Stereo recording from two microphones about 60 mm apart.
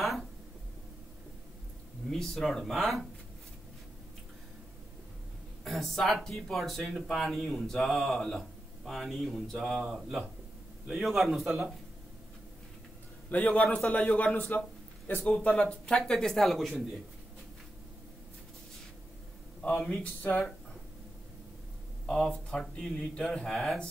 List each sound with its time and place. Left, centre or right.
2.0 s speech: centre
5.6 s speech: centre
9.8 s speech: centre
13.3 s a man's voice: left
15.4 s speech: centre
19.9 s a man's voice: left
22.0 s speech: centre
23.1 s speech: centre